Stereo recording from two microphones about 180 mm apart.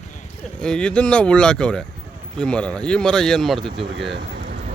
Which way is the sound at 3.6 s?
30° right (ahead or behind).